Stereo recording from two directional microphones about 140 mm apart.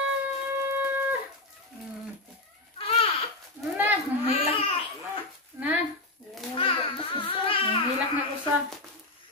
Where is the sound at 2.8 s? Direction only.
40° left (ahead or behind).